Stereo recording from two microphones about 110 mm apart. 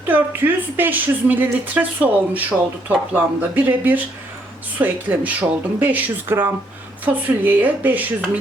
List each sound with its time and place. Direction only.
0.1 s speech: 20° right (ahead or behind)